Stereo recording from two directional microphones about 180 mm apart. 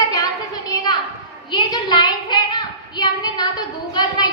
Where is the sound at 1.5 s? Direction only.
25° left (ahead or behind).